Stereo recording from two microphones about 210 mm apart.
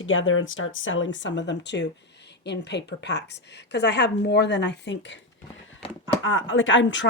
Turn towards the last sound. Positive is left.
turn(degrees=60)  # may be behind; listen again after turning